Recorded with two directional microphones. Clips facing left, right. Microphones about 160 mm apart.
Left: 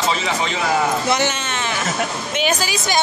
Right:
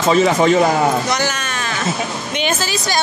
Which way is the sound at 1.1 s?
25° left (ahead or behind).